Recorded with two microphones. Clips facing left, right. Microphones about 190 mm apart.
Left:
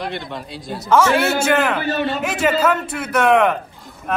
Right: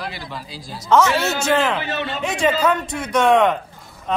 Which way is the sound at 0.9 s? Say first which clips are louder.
Left 1 dB; 10° left (ahead or behind).